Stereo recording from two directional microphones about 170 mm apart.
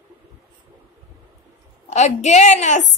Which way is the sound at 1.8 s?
40° left (ahead or behind).